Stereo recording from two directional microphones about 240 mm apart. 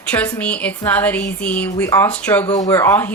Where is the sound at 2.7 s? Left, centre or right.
Centre.